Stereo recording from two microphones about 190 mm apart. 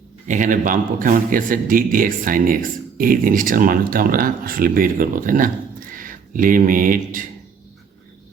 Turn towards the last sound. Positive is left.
turn(degrees=-45)  # may be behind; listen again after turning